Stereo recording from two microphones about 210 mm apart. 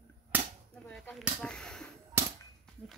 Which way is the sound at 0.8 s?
5° left (ahead or behind).